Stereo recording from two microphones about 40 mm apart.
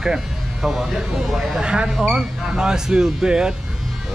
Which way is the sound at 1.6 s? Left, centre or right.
Right.